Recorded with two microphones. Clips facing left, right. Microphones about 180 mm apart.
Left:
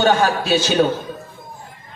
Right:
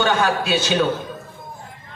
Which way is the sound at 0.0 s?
45° left (ahead or behind).